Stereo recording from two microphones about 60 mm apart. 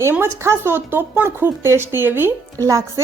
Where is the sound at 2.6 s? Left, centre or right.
Right.